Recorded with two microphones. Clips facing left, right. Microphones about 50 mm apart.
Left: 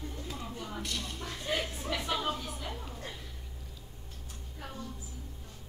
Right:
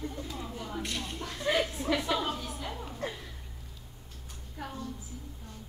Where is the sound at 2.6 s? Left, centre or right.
Centre.